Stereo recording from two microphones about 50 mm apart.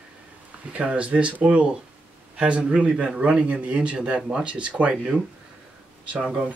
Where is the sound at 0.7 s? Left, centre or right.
Right.